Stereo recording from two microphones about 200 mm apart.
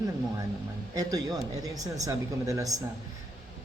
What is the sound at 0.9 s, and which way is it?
A man's voice, 20° right (ahead or behind).